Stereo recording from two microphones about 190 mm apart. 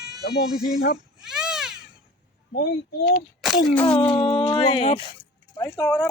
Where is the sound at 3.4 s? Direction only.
Centre (ahead or behind).